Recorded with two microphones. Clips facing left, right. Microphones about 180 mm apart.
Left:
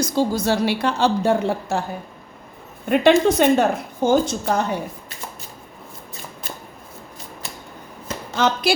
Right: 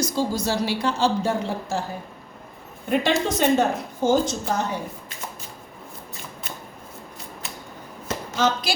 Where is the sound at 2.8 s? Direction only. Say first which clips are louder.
Left 7 dB; 60° left (ahead or behind).